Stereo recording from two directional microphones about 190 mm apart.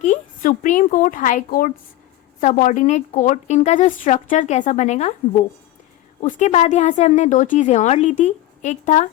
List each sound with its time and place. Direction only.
0.0 s a woman's voice: 40° left (ahead or behind)